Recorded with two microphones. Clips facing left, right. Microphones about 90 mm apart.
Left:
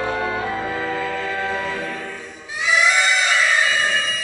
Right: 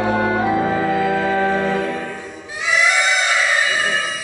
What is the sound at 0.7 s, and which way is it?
Music, 15° right (ahead or behind).